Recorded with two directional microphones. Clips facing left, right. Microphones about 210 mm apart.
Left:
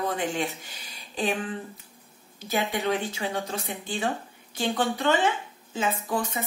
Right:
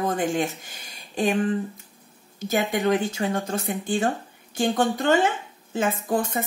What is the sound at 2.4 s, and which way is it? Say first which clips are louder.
Speech: right 4 dB; 45° right (ahead or behind).